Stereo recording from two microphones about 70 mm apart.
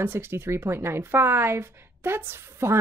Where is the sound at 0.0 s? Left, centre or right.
Right.